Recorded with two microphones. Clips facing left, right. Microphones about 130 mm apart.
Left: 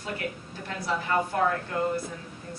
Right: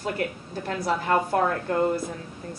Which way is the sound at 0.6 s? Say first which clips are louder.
Right 5 dB; 40° right (ahead or behind).